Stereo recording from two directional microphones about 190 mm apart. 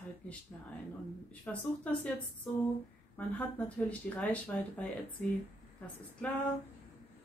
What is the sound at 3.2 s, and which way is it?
Speech, 10° left (ahead or behind).